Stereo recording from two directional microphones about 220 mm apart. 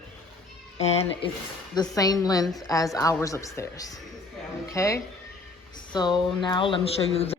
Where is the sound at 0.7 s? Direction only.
30° left (ahead or behind).